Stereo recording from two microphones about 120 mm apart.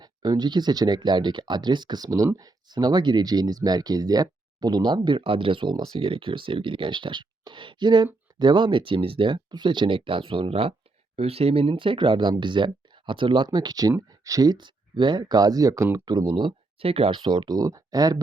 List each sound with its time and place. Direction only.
0.0 s speech: 35° right (ahead or behind)
16.1 s speech: 40° right (ahead or behind)